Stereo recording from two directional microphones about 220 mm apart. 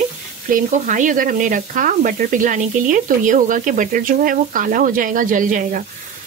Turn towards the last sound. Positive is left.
turn(degrees=-35)  # may be behind; listen again after turning